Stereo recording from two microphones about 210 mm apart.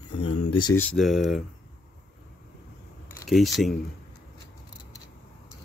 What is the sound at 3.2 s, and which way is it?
Speech, centre (ahead or behind).